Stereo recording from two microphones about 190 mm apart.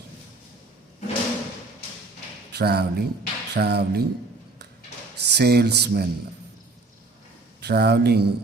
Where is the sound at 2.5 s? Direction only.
60° right (ahead or behind).